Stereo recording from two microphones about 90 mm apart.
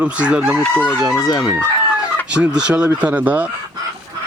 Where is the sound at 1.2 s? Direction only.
55° left (ahead or behind).